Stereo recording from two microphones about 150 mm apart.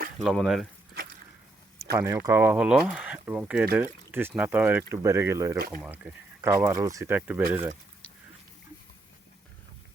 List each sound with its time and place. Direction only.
0.2 s speech: centre (ahead or behind)
1.9 s speech: 20° right (ahead or behind)
5.8 s speech: 5° right (ahead or behind)
6.4 s speech: 20° right (ahead or behind)